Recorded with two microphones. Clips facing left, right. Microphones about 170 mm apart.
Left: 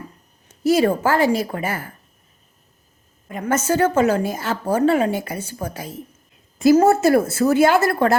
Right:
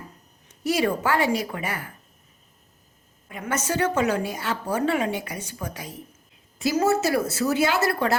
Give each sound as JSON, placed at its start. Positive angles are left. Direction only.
{"t": 0.6, "sound": "a woman's voice", "side_deg": 40}
{"t": 3.2, "sound": "a woman's voice", "side_deg": 45}